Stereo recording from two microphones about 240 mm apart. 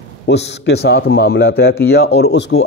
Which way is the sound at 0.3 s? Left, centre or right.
Left.